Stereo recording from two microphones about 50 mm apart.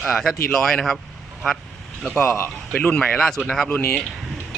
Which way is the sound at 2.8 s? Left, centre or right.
Left.